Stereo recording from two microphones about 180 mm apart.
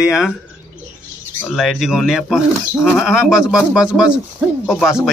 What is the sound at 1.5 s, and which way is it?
Speech, centre (ahead or behind).